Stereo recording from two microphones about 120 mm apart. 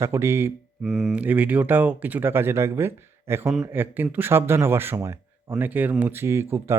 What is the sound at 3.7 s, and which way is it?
Speech, 20° right (ahead or behind).